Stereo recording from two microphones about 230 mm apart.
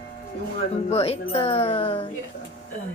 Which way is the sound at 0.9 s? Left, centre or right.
Left.